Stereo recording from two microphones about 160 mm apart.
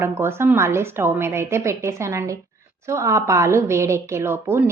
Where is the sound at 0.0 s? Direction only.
15° right (ahead or behind).